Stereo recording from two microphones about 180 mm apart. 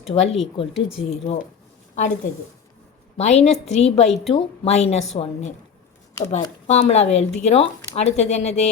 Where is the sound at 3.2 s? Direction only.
40° left (ahead or behind).